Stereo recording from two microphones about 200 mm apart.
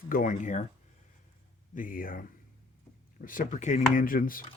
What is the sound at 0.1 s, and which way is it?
Speech, 40° left (ahead or behind).